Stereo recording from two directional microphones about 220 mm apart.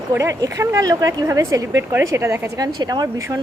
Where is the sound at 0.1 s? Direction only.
15° right (ahead or behind).